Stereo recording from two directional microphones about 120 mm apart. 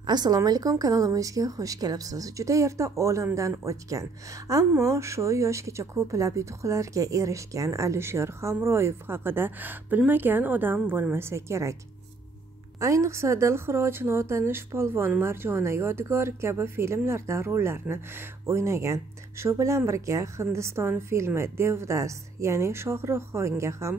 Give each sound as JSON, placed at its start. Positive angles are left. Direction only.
{"t": 0.0, "sound": "speech", "side_deg": -35}
{"t": 12.8, "sound": "speech", "side_deg": -25}